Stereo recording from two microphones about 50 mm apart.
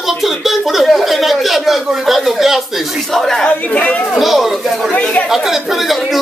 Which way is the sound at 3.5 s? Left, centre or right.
Left.